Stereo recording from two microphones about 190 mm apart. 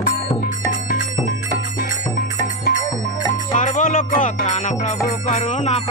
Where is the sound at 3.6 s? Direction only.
45° left (ahead or behind).